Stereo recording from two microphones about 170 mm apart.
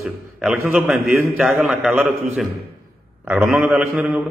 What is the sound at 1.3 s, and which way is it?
Speech, centre (ahead or behind).